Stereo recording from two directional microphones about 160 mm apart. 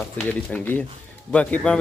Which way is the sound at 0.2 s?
10° left (ahead or behind).